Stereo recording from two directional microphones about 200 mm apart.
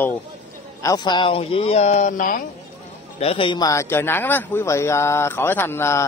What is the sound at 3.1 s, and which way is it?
A man's voice, 30° left (ahead or behind).